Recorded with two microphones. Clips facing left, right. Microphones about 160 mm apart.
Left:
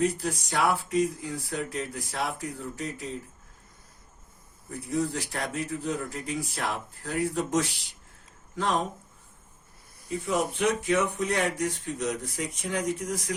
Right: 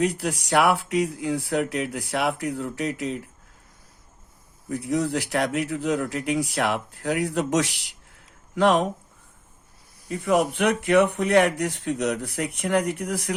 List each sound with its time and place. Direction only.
0.0 s speech: 70° right (ahead or behind)
4.7 s speech: 80° right
10.1 s speech: 60° right (ahead or behind)